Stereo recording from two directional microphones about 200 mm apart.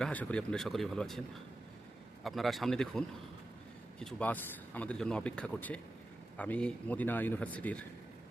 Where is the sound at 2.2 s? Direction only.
Centre (ahead or behind).